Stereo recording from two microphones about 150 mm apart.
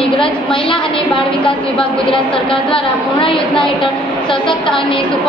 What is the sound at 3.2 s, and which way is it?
A woman's voice, 35° left (ahead or behind).